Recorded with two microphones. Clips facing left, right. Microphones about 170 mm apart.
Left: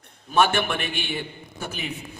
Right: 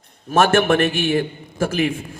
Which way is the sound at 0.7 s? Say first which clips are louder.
Right 12 dB; 80° right.